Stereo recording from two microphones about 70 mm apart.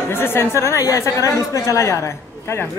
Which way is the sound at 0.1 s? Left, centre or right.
Left.